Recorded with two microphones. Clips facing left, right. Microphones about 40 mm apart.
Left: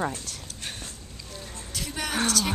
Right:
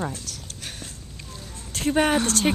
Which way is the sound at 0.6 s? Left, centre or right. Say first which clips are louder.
Left 1 dB; centre.